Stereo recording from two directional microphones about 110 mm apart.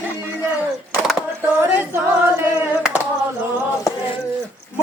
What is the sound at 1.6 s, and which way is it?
Singing, 15° right (ahead or behind).